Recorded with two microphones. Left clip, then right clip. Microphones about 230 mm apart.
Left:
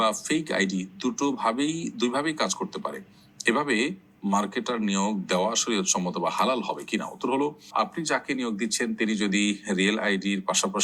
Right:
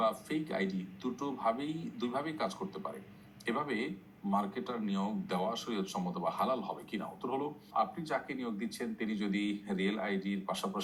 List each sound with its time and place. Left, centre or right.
0.0 s speech: left